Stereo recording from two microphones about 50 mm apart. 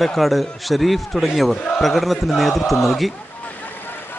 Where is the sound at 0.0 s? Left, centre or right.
Centre.